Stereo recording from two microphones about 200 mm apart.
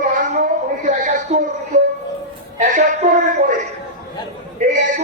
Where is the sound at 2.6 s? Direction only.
40° right (ahead or behind).